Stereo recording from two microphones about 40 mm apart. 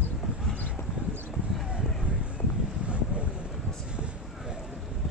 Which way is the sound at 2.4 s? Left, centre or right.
Left.